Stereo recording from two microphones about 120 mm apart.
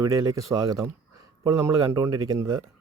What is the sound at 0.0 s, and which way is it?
Speech, 25° right (ahead or behind).